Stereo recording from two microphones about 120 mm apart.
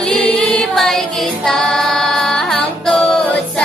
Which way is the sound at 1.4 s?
5° left (ahead or behind).